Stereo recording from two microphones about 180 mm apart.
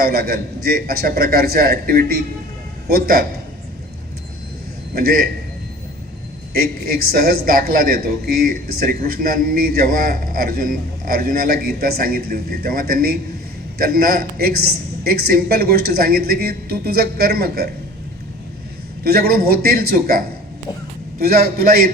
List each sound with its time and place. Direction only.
0.0 s speech: 60° right (ahead or behind)
7.1 s speech: 55° right (ahead or behind)
19.0 s speech: 60° right (ahead or behind)